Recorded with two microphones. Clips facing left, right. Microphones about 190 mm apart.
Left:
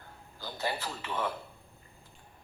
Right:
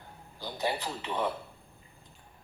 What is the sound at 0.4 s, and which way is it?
Speech, 15° right (ahead or behind).